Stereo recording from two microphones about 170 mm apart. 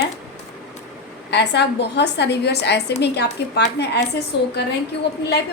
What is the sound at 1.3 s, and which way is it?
A woman's voice, 85° left.